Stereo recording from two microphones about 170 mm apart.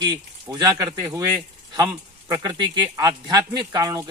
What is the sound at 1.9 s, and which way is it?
A man's voice, 20° right (ahead or behind).